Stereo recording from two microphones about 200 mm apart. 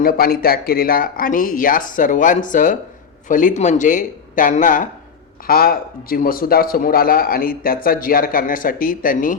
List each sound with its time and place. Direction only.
0.0 s a man's voice: 50° left (ahead or behind)